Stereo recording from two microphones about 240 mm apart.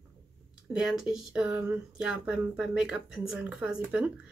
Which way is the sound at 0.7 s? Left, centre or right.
Centre.